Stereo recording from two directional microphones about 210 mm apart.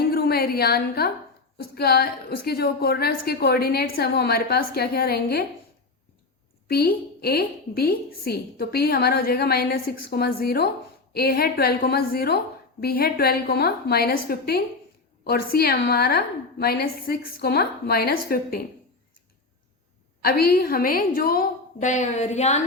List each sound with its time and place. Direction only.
0.0 s a sound: 50° left (ahead or behind)
1.5 s a woman's voice: 50° left (ahead or behind)
6.7 s a woman's voice: 45° left (ahead or behind)
20.2 s a woman's voice: 45° left (ahead or behind)